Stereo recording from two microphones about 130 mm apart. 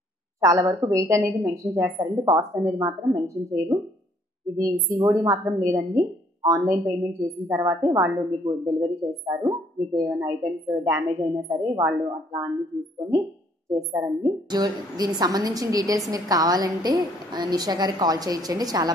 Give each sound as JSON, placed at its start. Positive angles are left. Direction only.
{"t": 0.4, "sound": "a woman's voice", "side_deg": -25}
{"t": 13.7, "sound": "a woman's voice", "side_deg": -25}